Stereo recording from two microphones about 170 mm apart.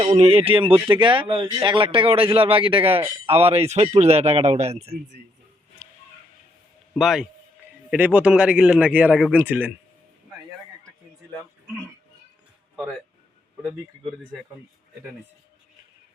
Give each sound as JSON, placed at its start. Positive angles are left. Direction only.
{"t": 0.0, "sound": "speech", "side_deg": -35}
{"t": 7.0, "sound": "a man's voice", "side_deg": 0}